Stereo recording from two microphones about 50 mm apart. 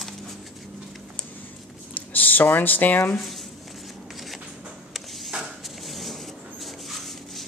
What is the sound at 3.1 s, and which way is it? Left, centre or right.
Speech, centre.